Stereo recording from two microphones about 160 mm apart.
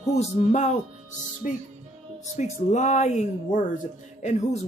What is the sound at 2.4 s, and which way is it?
Speech, 45° left (ahead or behind).